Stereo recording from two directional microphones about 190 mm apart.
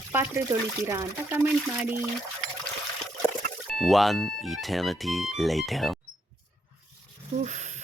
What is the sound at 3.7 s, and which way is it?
Speech, centre (ahead or behind).